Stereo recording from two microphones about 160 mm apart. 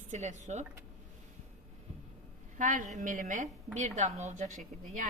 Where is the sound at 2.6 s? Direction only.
55° right (ahead or behind).